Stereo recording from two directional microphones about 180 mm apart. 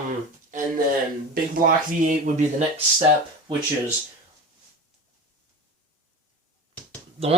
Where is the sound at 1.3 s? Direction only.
45° right (ahead or behind).